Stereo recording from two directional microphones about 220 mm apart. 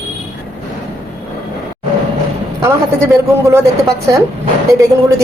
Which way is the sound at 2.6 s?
10° right (ahead or behind).